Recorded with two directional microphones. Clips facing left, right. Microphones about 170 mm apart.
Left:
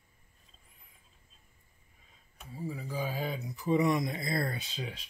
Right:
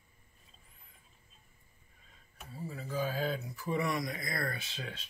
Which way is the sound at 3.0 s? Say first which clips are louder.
Right 2 dB; 10° left (ahead or behind).